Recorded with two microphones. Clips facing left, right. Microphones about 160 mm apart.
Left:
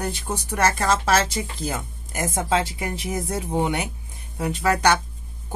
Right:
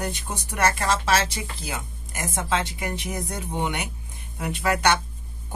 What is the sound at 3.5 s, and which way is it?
Speech, 40° left (ahead or behind).